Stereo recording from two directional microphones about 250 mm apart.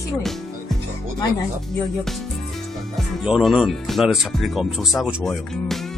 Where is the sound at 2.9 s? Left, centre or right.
Centre.